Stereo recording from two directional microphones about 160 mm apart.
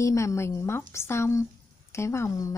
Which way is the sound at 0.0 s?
20° left (ahead or behind).